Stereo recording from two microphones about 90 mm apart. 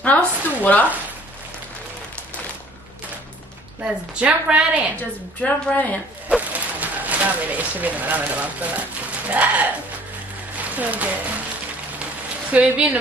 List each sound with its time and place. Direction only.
0.0 s speech: 15° left (ahead or behind)
3.8 s a woman's voice: 15° right (ahead or behind)
5.4 s speech: 15° left (ahead or behind)
6.2 s a woman's voice: 15° right (ahead or behind)
10.6 s music: 15° right (ahead or behind)
12.5 s a woman's voice: 10° right (ahead or behind)